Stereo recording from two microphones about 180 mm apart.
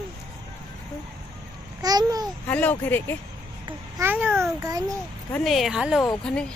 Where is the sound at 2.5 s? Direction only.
10° left (ahead or behind).